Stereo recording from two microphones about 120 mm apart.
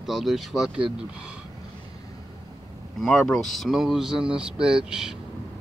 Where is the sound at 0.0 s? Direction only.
Centre (ahead or behind).